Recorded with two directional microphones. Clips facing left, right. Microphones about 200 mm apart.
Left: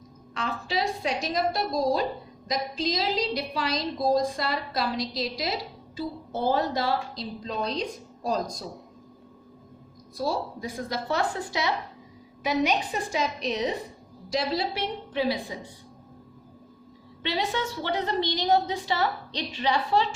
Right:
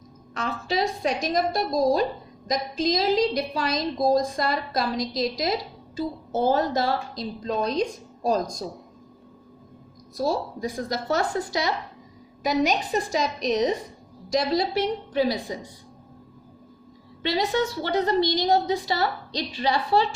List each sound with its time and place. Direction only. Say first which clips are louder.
0.3 s a woman's voice: right 3 dB; 45° right (ahead or behind)
10.2 s a woman's voice: right 3 dB; 45° right (ahead or behind)
17.2 s a woman's voice: right 5 dB; 40° right (ahead or behind)